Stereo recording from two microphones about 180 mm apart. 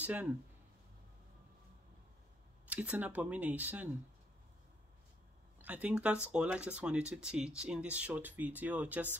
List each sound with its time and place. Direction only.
0.0 s speech: 10° right (ahead or behind)
2.7 s speech: 10° right (ahead or behind)
5.6 s speech: 10° right (ahead or behind)